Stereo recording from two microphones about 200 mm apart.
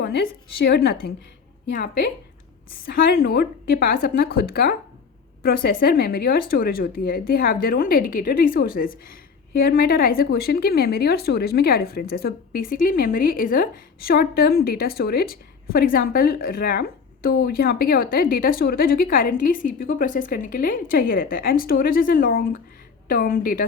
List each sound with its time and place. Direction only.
0.0 s a woman's voice: 55° left (ahead or behind)